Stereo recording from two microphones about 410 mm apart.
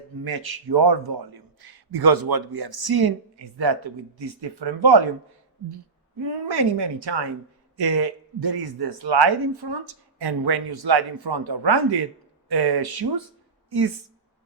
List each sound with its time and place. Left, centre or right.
0.3 s speech: right
6.2 s speech: right
7.8 s speech: right